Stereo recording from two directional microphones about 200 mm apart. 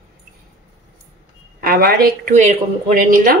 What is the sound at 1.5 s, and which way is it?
A woman's voice, 45° right (ahead or behind).